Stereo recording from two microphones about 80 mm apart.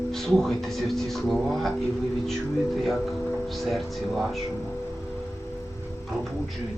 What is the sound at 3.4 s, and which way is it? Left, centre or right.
Speech, centre.